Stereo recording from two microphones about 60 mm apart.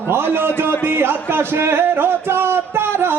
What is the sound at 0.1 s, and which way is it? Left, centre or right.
Speech, right.